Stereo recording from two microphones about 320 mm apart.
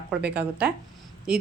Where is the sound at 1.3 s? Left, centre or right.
Centre.